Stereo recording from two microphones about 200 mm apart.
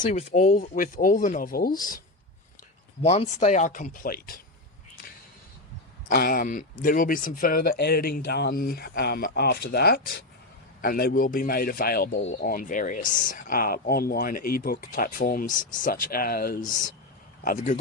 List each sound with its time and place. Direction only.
0.0 s speech: 35° left (ahead or behind)
3.0 s speech: 35° left (ahead or behind)
6.1 s speech: 50° left (ahead or behind)